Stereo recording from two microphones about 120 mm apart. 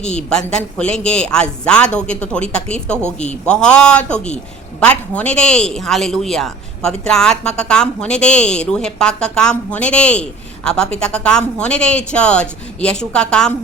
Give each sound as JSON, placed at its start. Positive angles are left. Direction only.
{"t": 0.0, "sound": "speech", "side_deg": 10}